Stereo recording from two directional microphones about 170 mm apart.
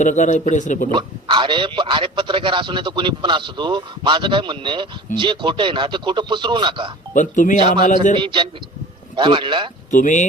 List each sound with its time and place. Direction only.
0.0 s a man's voice: 45° left (ahead or behind)
0.9 s a man's voice: 30° right (ahead or behind)
7.1 s a man's voice: 50° left (ahead or behind)
8.1 s a man's voice: 30° right (ahead or behind)
9.9 s a man's voice: 45° left (ahead or behind)